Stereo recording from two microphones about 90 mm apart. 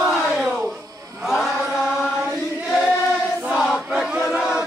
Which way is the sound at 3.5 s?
5° right (ahead or behind).